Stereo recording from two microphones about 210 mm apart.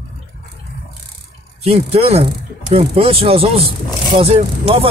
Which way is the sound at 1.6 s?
30° right (ahead or behind).